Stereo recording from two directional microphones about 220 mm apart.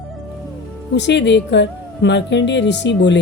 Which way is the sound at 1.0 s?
55° left (ahead or behind).